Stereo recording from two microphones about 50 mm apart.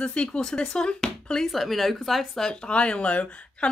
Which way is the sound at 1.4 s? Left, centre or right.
Centre.